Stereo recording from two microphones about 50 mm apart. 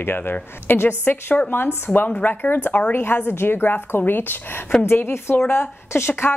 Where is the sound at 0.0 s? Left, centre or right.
Left.